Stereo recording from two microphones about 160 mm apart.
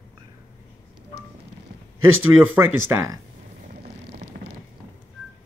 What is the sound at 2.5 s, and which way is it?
Speech, 15° right (ahead or behind).